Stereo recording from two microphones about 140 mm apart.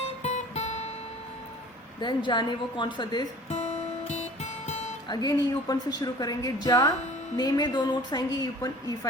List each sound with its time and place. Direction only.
0.2 s guitar: 50° left (ahead or behind)
2.0 s a woman's voice: 35° left (ahead or behind)
3.5 s music: 55° left (ahead or behind)
5.0 s a woman's voice: 25° left (ahead or behind)